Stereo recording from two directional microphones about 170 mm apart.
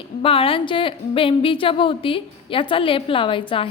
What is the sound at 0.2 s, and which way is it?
A woman's voice, 30° left (ahead or behind).